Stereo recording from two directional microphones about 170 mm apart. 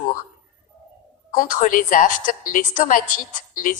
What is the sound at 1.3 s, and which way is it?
A woman's voice, 50° left (ahead or behind).